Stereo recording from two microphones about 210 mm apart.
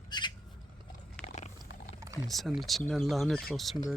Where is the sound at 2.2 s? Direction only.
Centre (ahead or behind).